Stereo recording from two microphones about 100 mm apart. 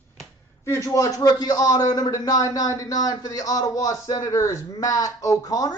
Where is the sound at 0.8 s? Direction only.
35° left (ahead or behind).